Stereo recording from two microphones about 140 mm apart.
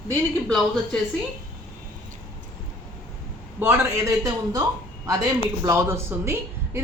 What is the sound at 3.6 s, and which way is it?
A man's voice, 20° right (ahead or behind).